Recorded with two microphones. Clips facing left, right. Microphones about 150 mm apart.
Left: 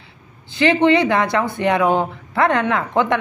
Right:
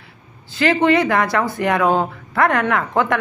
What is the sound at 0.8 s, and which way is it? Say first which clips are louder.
A woman's voice: even; 25° left (ahead or behind).